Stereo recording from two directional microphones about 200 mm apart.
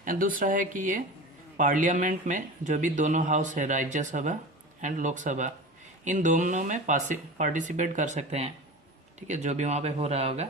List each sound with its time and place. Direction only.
0.0 s speech: 45° right (ahead or behind)